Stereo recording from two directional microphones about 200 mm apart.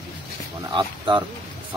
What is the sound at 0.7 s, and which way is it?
Speech, 25° right (ahead or behind).